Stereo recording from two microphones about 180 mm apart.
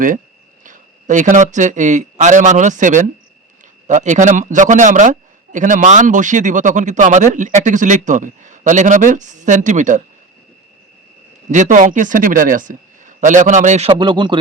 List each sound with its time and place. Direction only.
0.6 s a man's voice: 45° right (ahead or behind)
11.5 s a man's voice: 45° right (ahead or behind)
14.0 s speech: 25° right (ahead or behind)